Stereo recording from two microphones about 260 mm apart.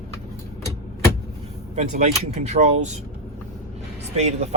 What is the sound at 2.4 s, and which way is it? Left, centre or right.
Speech, right.